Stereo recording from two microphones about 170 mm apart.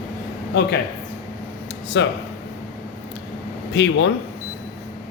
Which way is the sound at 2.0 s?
90° left.